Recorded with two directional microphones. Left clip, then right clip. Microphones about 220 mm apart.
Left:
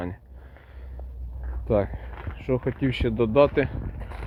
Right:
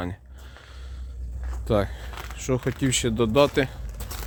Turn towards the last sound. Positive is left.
turn(degrees=-20)  # may be behind; listen again after turning